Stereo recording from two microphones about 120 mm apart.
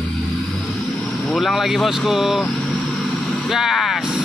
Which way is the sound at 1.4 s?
Centre (ahead or behind).